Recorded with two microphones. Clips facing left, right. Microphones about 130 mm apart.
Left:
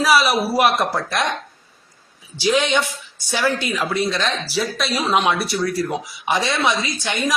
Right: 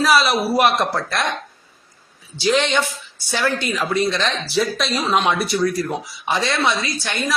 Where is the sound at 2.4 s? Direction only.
5° left (ahead or behind).